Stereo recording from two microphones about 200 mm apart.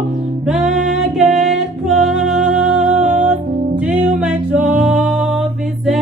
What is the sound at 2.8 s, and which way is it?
Music, 35° right (ahead or behind).